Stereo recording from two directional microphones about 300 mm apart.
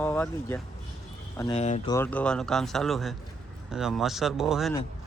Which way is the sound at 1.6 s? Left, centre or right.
Left.